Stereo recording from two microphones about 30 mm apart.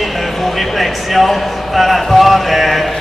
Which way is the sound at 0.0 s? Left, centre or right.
Centre.